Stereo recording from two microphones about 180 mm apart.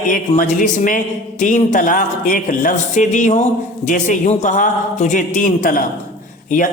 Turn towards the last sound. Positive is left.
turn(degrees=45)  # may be behind; listen again after turning